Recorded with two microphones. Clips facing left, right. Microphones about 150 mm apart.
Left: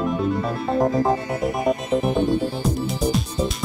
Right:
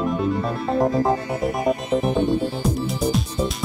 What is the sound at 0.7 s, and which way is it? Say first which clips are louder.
Music: even; centre (ahead or behind).